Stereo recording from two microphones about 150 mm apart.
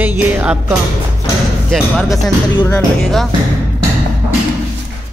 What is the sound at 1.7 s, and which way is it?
Speech, centre (ahead or behind).